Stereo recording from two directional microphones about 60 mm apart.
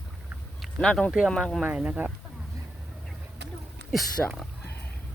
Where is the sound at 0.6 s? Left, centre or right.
Centre.